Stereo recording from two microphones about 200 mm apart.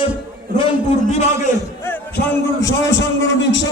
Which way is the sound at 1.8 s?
10° left (ahead or behind).